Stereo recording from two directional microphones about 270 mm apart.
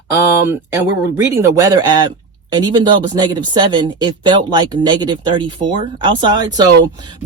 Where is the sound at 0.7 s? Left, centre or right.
Centre.